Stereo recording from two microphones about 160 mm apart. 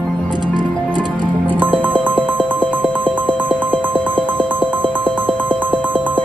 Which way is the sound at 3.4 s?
10° right (ahead or behind).